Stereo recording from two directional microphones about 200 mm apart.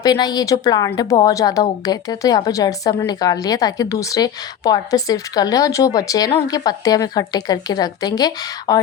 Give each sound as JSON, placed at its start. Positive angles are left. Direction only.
{"t": 0.0, "sound": "a woman's voice", "side_deg": 20}